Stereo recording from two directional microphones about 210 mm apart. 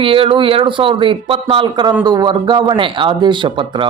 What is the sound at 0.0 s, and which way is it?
Speech, 25° right (ahead or behind).